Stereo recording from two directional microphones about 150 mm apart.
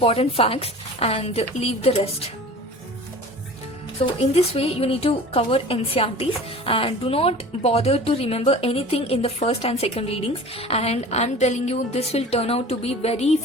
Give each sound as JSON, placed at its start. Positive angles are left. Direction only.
{"t": 0.0, "sound": "speech", "side_deg": 40}
{"t": 4.2, "sound": "speech", "side_deg": 45}